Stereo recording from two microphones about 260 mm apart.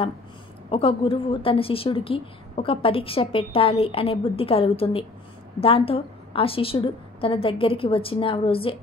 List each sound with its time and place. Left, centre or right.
0.7 s a woman's voice: left